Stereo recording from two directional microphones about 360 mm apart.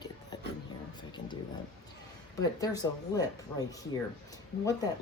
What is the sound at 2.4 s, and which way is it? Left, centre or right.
Speech, centre.